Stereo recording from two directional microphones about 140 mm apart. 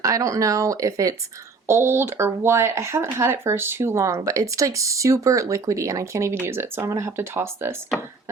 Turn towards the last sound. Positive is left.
turn(degrees=-20)  # may be behind; listen again after turning